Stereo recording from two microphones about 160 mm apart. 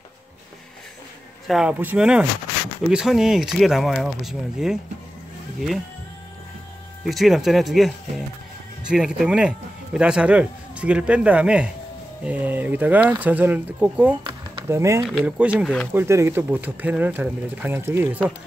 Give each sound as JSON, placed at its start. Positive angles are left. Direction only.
{"t": 1.5, "sound": "speech", "side_deg": -5}
{"t": 7.1, "sound": "speech", "side_deg": 0}
{"t": 15.0, "sound": "speech", "side_deg": -5}
{"t": 15.6, "sound": "speech", "side_deg": 5}
{"t": 15.9, "sound": "speech", "side_deg": -15}